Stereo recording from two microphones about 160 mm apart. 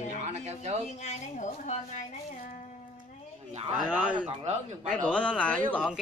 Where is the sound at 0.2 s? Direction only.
45° right (ahead or behind).